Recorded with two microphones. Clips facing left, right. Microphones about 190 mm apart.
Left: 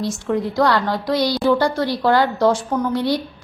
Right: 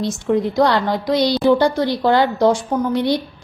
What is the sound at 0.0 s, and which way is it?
A woman's voice, 20° right (ahead or behind).